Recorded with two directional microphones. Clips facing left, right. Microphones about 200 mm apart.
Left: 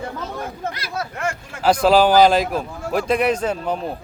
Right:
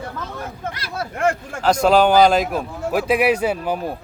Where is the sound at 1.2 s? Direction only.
55° right (ahead or behind).